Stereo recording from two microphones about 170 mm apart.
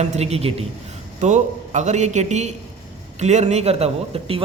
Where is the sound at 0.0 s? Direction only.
40° right (ahead or behind).